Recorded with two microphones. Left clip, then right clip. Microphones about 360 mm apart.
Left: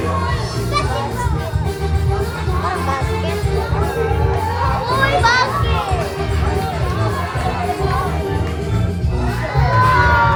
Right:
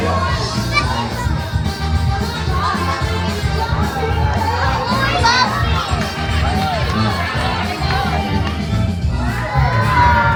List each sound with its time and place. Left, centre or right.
5.2 s children playing: left
9.6 s children shouting: centre